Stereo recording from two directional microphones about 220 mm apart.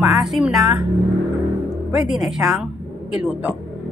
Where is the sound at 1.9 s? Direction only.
Centre (ahead or behind).